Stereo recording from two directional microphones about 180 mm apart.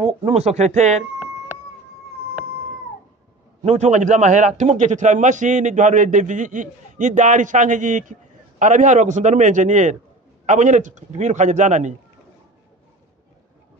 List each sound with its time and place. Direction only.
0.2 s a man's voice: 35° right (ahead or behind)
3.6 s a man's voice: 40° right (ahead or behind)